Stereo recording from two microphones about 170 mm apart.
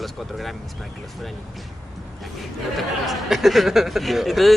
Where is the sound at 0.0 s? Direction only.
Centre (ahead or behind).